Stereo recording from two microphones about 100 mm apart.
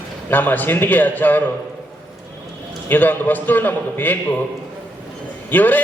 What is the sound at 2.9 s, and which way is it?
A man's voice, 20° left (ahead or behind).